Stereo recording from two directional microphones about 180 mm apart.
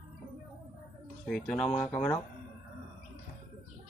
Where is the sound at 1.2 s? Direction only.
5° left (ahead or behind).